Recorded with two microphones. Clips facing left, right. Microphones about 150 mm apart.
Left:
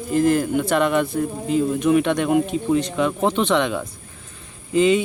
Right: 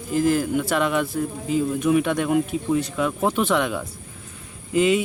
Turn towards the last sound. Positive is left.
turn(degrees=-5)  # may be behind; listen again after turning